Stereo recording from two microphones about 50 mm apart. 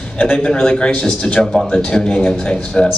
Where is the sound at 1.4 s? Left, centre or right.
Centre.